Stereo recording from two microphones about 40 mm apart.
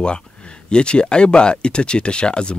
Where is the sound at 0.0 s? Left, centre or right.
Left.